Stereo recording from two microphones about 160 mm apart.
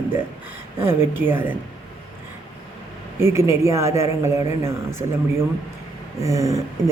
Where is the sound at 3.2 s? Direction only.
15° right (ahead or behind).